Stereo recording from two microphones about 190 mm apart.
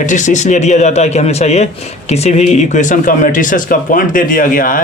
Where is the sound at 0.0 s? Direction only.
40° left (ahead or behind).